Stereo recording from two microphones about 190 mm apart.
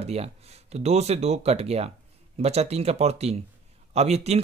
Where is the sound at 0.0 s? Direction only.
35° right (ahead or behind).